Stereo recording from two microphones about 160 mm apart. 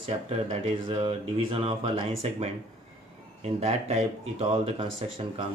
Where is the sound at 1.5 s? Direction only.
35° right (ahead or behind).